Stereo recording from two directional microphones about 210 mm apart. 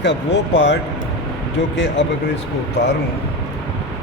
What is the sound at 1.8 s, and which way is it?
Speech, 55° left (ahead or behind).